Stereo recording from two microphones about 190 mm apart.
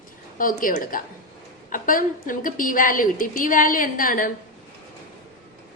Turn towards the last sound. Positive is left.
turn(degrees=45)  # may be behind; listen again after turning